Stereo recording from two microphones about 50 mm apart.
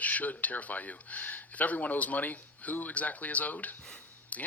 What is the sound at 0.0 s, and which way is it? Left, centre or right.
Speech, left.